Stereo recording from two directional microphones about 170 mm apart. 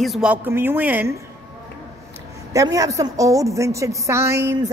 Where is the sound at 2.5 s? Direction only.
20° right (ahead or behind).